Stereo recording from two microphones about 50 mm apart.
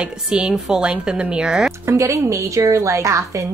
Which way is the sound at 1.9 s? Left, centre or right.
Right.